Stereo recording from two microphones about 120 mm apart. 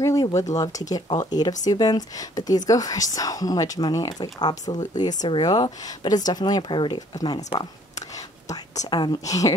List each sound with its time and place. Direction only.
0.0 s speech: 25° left (ahead or behind)
8.9 s speech: 35° left (ahead or behind)